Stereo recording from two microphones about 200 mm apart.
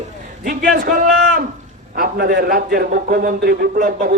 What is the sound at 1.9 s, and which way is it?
A man's voice, 45° right (ahead or behind).